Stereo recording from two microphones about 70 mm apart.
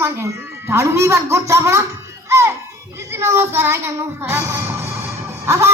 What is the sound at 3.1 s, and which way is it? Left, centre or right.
Music, right.